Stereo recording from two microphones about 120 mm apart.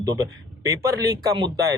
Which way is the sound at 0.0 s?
25° right (ahead or behind).